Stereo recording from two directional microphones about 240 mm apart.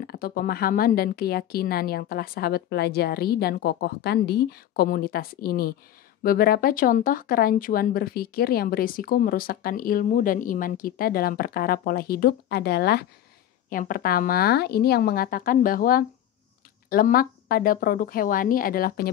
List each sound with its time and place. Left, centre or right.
0.0 s speech: left